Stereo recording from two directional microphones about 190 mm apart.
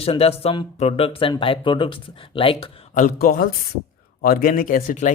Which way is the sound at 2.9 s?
40° left (ahead or behind).